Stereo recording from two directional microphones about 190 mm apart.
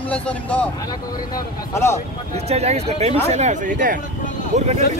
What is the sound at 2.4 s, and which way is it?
Speech, 35° right (ahead or behind).